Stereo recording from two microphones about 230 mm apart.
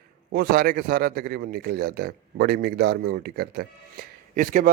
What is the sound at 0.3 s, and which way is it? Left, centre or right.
A man's voice, right.